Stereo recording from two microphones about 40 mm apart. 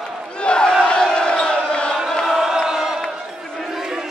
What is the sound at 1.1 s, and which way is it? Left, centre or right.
Crowd, left.